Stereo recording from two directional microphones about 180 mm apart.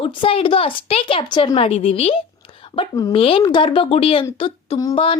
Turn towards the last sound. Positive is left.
turn(degrees=25)  # may be behind; listen again after turning